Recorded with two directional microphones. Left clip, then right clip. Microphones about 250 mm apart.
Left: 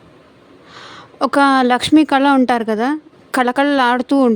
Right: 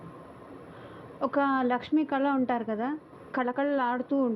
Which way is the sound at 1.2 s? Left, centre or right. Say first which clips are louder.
Left 14 dB; left.